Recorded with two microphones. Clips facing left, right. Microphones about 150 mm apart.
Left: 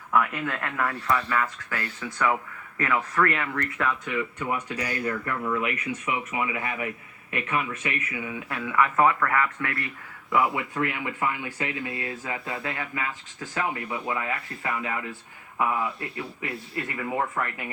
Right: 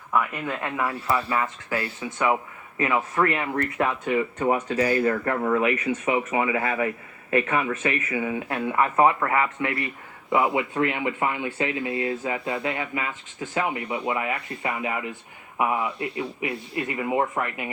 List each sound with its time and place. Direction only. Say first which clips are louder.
0.1 s speech: even; 10° right (ahead or behind); by 3.7 s 25° right (ahead or behind)
3.8 s speech: right 4 dB; 40° right (ahead or behind)
5.5 s a man's voice: right 6 dB; 30° right (ahead or behind)
7.8 s speech: right 6 dB; 50° right (ahead or behind)
8.7 s speech: right 1 dB; 30° right (ahead or behind)